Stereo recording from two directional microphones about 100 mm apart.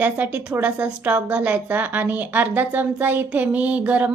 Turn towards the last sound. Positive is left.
turn(degrees=-15)  # may be behind; listen again after turning